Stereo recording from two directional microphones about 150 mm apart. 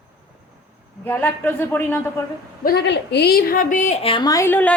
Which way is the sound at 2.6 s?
90° left.